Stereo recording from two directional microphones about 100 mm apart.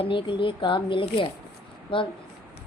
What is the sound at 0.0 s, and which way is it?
A woman's voice, 60° left (ahead or behind).